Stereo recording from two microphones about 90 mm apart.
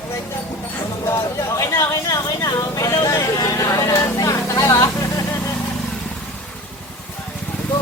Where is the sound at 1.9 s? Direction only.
45° left (ahead or behind).